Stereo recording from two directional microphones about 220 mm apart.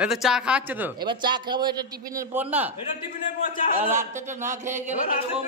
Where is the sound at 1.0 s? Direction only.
20° right (ahead or behind).